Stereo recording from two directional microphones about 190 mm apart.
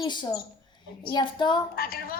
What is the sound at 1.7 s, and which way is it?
Speech, 50° left (ahead or behind).